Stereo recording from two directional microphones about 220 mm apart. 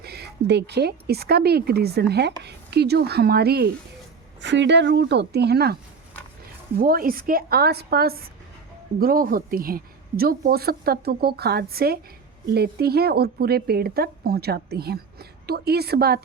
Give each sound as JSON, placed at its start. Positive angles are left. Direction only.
{"t": 0.0, "sound": "a woman's voice", "side_deg": -45}
{"t": 6.7, "sound": "a woman's voice", "side_deg": -40}